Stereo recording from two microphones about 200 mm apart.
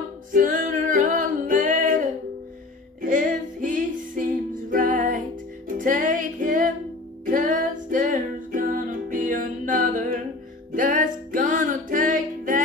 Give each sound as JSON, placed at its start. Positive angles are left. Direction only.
{"t": 0.3, "sound": "music", "side_deg": -40}
{"t": 3.0, "sound": "music", "side_deg": -40}